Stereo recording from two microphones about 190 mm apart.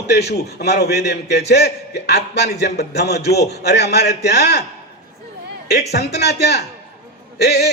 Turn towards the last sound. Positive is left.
turn(degrees=60)  # may be behind; listen again after turning